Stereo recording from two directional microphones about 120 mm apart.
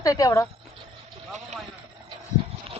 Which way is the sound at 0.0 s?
30° left (ahead or behind).